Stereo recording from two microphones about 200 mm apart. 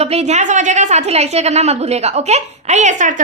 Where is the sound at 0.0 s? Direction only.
30° right (ahead or behind).